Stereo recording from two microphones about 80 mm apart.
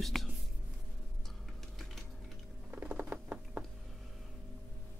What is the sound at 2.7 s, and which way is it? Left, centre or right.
Patter, right.